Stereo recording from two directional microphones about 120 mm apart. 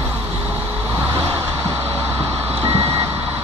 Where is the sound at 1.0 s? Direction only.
15° right (ahead or behind).